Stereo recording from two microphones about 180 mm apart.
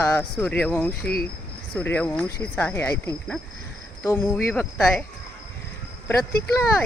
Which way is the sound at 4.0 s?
15° left (ahead or behind).